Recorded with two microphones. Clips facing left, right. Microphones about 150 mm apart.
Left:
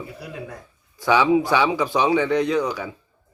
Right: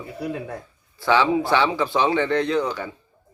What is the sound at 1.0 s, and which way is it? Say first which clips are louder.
Speech: left 2 dB; 10° left (ahead or behind).